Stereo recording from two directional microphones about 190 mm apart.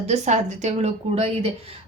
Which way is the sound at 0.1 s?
35° right (ahead or behind).